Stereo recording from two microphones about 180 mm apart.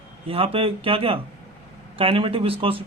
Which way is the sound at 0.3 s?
30° right (ahead or behind).